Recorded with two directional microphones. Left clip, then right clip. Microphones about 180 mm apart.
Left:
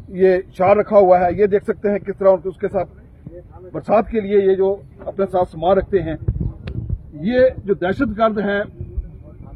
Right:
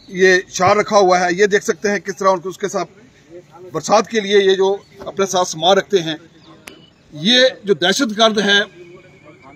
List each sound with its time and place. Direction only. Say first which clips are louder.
0.1 s a man's voice: right 2 dB; 35° left (ahead or behind); by 6.1 s 10° left (ahead or behind)
7.2 s a man's voice: right 2 dB; 5° right (ahead or behind)